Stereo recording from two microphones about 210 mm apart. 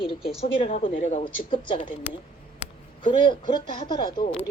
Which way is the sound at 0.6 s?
25° left (ahead or behind).